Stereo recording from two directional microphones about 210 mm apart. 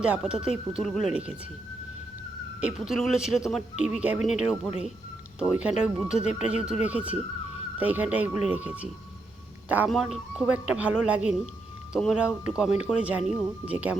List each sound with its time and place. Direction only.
0.0 s speech: 5° right (ahead or behind)
2.6 s speech: 5° right (ahead or behind)